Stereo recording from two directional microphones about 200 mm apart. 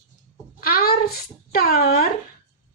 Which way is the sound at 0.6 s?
50° left (ahead or behind).